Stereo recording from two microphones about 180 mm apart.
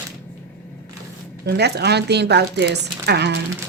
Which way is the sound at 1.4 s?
65° right (ahead or behind).